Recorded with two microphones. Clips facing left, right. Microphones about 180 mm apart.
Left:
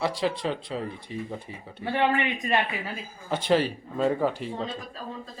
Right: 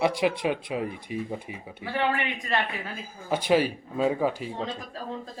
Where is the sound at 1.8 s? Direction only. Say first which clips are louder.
Left 3 dB; 20° left (ahead or behind).